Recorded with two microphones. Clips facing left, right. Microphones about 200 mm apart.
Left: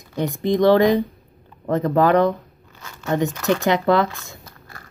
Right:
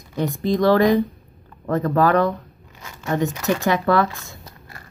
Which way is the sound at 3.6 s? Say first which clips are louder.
Left 1 dB; 20° left (ahead or behind).